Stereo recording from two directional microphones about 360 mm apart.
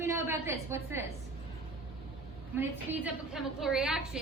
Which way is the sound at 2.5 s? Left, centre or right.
Centre.